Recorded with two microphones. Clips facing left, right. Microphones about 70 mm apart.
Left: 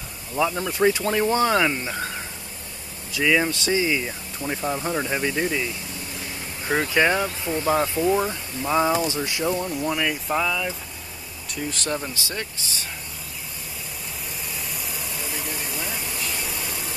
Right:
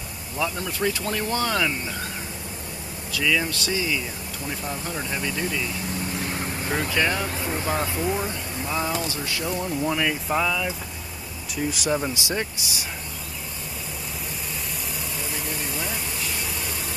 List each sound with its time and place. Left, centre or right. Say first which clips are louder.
0.4 s speech: left 5 dB; centre
3.1 s speech: left 3 dB; left
6.7 s speech: left 5 dB; left
9.6 s speech: even; centre
15.0 s vehicle: right 1 dB; centre